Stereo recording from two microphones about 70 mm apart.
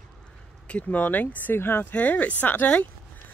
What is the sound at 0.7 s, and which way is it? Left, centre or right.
Speech, left.